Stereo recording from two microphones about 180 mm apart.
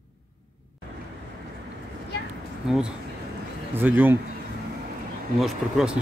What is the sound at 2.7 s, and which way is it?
Speech, 5° right (ahead or behind).